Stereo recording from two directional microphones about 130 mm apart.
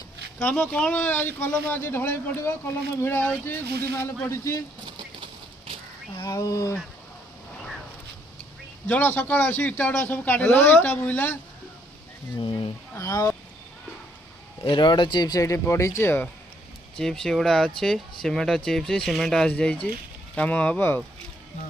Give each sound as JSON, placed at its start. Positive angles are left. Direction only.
{"t": 0.3, "sound": "a man's voice", "side_deg": 15}
{"t": 4.9, "sound": "clip-clop", "side_deg": -40}
{"t": 6.1, "sound": "speech", "side_deg": 20}
{"t": 8.9, "sound": "a man's voice", "side_deg": 15}
{"t": 12.4, "sound": "speech", "side_deg": 40}
{"t": 13.0, "sound": "speech", "side_deg": 25}
{"t": 14.6, "sound": "speech", "side_deg": 35}
{"t": 17.0, "sound": "a man's voice", "side_deg": 5}